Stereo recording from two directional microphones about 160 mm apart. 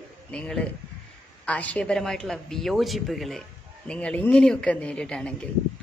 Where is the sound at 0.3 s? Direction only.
5° left (ahead or behind).